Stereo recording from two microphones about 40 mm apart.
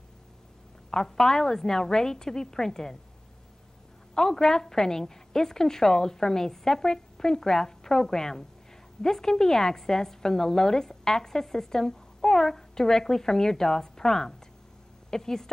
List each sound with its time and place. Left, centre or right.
0.8 s a woman's voice: centre
4.1 s a woman's voice: centre